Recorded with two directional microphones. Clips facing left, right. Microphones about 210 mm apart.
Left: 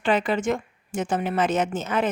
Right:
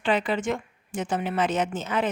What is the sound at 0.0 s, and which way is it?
A woman's voice, 45° left (ahead or behind).